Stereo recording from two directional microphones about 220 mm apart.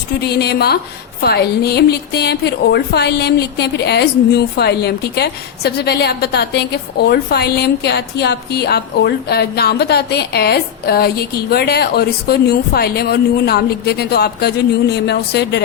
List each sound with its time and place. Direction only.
0.2 s a woman's voice: 50° left (ahead or behind)